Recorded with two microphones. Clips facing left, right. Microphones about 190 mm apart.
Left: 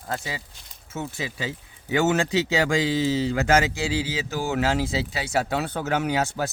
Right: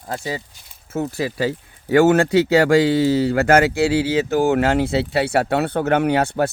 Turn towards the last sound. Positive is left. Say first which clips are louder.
# right 7 dB
turn(degrees=-60)  # may be behind; listen again after turning